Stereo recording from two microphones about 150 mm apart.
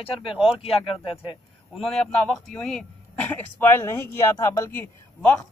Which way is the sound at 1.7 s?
Centre (ahead or behind).